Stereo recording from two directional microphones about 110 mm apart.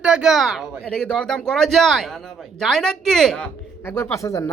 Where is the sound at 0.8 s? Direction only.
10° left (ahead or behind).